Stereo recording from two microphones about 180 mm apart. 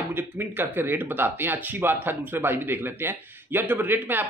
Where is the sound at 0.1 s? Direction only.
10° right (ahead or behind).